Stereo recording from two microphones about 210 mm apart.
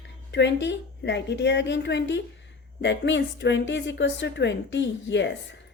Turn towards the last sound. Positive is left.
turn(degrees=55)  # may be behind; listen again after turning